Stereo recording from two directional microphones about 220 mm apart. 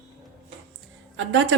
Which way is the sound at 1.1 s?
60° right (ahead or behind).